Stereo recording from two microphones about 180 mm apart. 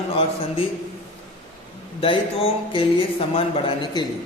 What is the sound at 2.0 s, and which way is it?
Speech, 30° left (ahead or behind).